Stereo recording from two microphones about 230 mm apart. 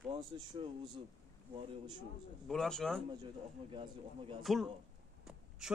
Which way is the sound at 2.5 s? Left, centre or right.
Centre.